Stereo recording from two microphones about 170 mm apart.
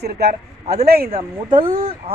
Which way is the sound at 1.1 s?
35° right (ahead or behind).